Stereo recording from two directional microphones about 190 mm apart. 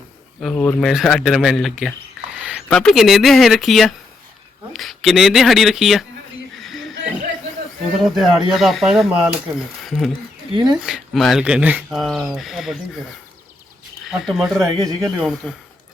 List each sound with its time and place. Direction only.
0.3 s speech: 5° left (ahead or behind)
6.6 s a sound: centre (ahead or behind)
8.0 s speech: centre (ahead or behind)
9.8 s mechanisms: centre (ahead or behind)
10.7 s speech: centre (ahead or behind)
14.1 s speech: centre (ahead or behind)
14.6 s speech: 15° right (ahead or behind)
15.2 s speech: centre (ahead or behind)